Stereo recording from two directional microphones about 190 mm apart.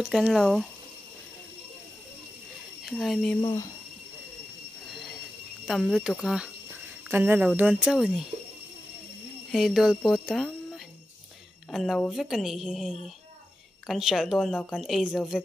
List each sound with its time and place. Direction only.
0.0 s speech: 5° right (ahead or behind)
2.8 s speech: centre (ahead or behind)
3.3 s speech: 20° left (ahead or behind)
5.7 s speech: centre (ahead or behind)
9.5 s speech: centre (ahead or behind)